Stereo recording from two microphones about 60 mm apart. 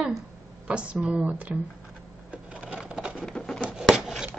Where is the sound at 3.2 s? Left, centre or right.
Centre.